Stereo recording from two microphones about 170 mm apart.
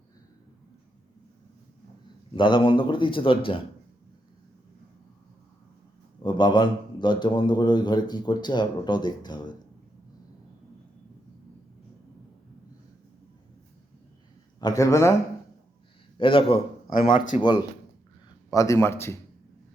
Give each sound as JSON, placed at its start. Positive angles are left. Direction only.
{"t": 2.3, "sound": "a man's voice", "side_deg": 30}
{"t": 6.2, "sound": "a man's voice", "side_deg": 25}
{"t": 14.6, "sound": "a man's voice", "side_deg": 20}
{"t": 16.1, "sound": "a man's voice", "side_deg": 30}